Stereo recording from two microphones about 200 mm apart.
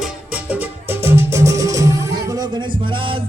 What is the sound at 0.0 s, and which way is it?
Music, 5° right (ahead or behind).